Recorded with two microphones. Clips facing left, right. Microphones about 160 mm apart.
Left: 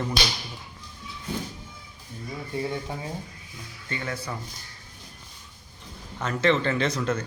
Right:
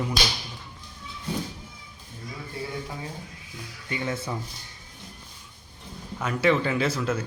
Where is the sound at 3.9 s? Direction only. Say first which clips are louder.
Right 3 dB; 20° right (ahead or behind).